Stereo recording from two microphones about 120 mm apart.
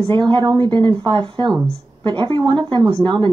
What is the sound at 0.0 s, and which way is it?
A woman's voice, 40° right (ahead or behind).